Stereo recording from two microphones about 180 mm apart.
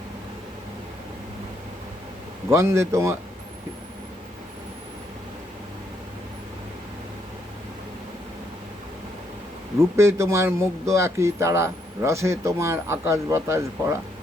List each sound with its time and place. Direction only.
2.5 s speech: 15° right (ahead or behind)
9.9 s speech: 15° right (ahead or behind)